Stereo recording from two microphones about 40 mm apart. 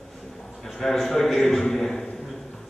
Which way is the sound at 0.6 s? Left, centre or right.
Centre.